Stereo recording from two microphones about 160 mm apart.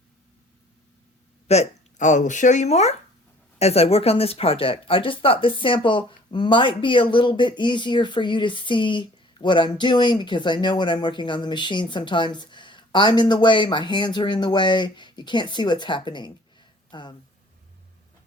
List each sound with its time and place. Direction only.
1.5 s speech: 45° left (ahead or behind); by 17.2 s 30° left (ahead or behind)